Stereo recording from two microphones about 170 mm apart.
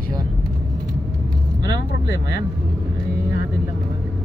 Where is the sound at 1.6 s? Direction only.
20° right (ahead or behind).